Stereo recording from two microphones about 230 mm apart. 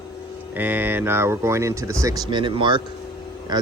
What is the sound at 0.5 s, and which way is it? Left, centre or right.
Speech, centre.